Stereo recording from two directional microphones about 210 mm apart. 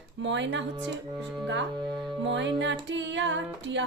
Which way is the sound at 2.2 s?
60° right (ahead or behind).